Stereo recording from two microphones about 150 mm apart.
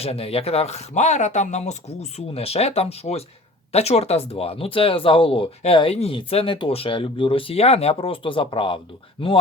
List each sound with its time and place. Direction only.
0.0 s speech: 40° left (ahead or behind)